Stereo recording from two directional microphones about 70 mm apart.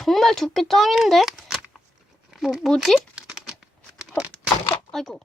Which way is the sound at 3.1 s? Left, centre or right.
Centre.